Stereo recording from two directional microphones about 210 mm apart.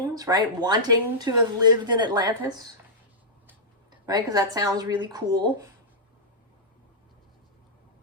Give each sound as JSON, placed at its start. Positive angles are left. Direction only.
{"t": 0.1, "sound": "a woman's voice", "side_deg": -20}
{"t": 4.0, "sound": "a woman's voice", "side_deg": -20}